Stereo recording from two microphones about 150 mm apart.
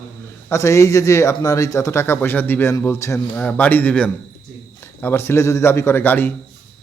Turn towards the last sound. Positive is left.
turn(degrees=15)  # may be behind; listen again after turning